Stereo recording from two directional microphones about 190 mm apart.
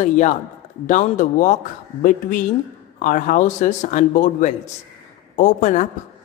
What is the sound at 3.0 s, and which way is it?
A man's voice, 45° left (ahead or behind).